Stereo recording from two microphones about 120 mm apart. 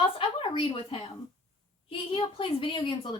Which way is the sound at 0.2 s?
50° left (ahead or behind).